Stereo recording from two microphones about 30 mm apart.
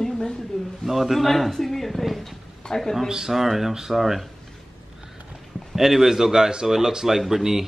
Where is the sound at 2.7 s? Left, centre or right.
Left.